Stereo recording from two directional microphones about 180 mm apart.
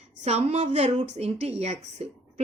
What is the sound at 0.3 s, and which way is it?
A woman's voice, 35° right (ahead or behind).